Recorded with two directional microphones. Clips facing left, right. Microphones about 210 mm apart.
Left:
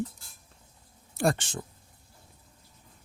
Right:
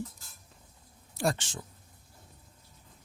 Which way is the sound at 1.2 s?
55° left (ahead or behind).